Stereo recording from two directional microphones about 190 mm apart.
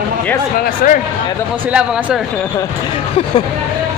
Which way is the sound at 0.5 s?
45° left (ahead or behind).